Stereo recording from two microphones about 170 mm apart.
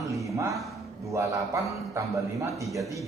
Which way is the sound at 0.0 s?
20° right (ahead or behind).